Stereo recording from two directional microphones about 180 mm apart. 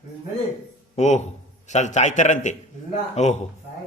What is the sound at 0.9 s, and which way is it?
A man's voice, 40° left (ahead or behind).